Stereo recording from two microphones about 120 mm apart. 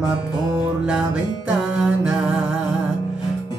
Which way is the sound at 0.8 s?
5° right (ahead or behind).